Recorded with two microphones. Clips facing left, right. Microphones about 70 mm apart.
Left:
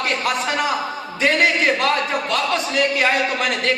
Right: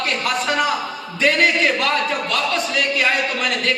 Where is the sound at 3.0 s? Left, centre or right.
Left.